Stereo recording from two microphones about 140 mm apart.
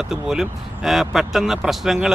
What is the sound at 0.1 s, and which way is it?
Speech, 5° right (ahead or behind).